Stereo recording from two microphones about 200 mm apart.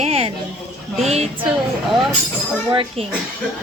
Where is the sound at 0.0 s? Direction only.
30° right (ahead or behind).